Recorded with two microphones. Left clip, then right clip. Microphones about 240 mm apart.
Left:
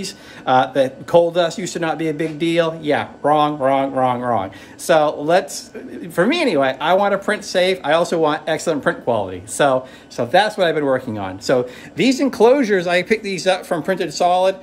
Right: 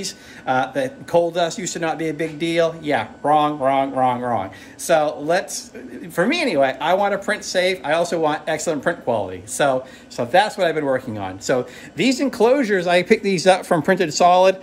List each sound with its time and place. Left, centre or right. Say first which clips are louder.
0.0 s speech: left 3 dB; centre
12.9 s speech: right 1 dB; centre; by 14.6 s right